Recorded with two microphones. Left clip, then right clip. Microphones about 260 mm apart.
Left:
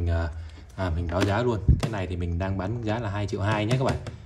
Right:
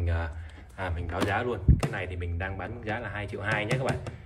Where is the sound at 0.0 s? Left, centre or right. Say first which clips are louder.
Left 3 dB; centre.